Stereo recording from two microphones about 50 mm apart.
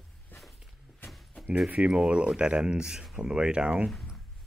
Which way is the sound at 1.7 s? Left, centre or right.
Right.